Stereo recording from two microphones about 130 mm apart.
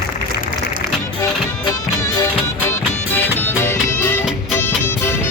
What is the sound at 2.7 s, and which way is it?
Music, 15° left (ahead or behind).